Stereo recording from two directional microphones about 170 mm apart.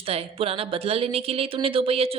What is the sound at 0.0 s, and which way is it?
Speech, 35° right (ahead or behind).